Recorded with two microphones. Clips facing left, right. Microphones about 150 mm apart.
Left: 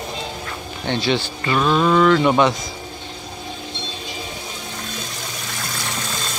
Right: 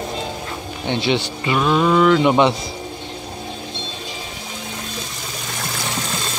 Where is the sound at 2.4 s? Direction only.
30° right (ahead or behind).